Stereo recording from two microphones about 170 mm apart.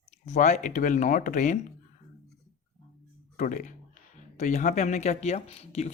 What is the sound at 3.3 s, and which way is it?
Speech, 50° left (ahead or behind).